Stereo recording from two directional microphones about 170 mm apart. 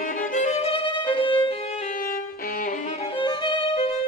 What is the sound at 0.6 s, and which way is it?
Violin, 30° left (ahead or behind).